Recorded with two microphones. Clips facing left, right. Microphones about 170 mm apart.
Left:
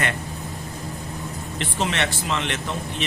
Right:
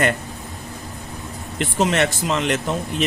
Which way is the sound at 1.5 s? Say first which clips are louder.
Right 6 dB; 40° right (ahead or behind).